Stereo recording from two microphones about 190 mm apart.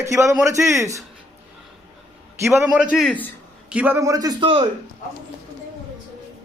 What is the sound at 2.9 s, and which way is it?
Speech, 5° left (ahead or behind).